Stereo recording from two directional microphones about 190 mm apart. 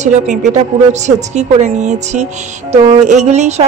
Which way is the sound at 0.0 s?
40° right (ahead or behind).